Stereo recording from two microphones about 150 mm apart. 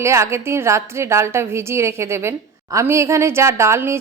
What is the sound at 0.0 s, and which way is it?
A woman's voice, 20° right (ahead or behind).